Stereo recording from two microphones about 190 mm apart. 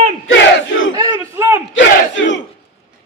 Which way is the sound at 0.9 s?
20° right (ahead or behind).